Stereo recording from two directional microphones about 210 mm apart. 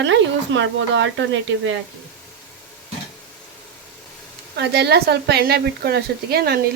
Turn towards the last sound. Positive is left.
turn(degrees=-50)  # may be behind; listen again after turning